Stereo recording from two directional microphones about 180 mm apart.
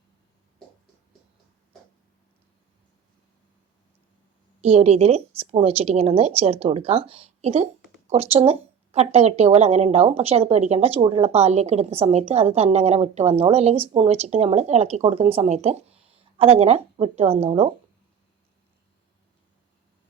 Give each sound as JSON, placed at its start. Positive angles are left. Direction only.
{"t": 4.6, "sound": "speech", "side_deg": -35}